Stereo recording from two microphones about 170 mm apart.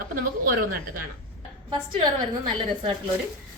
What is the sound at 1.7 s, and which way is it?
Speech, 25° right (ahead or behind).